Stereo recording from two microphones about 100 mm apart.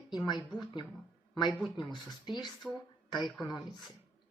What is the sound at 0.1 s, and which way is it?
Speech, 45° left (ahead or behind).